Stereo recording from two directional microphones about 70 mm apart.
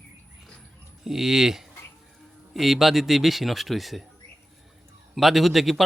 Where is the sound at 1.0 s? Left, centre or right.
Centre.